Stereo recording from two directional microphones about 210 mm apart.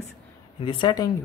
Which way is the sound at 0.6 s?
25° left (ahead or behind).